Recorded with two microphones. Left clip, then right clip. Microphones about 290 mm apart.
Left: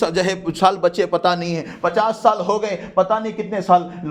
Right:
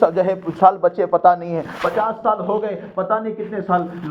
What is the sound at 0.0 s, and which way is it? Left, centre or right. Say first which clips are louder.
A man's voice: right 3 dB; left.